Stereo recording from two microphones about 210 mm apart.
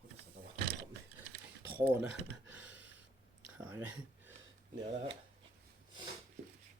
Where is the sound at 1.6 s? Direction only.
10° right (ahead or behind).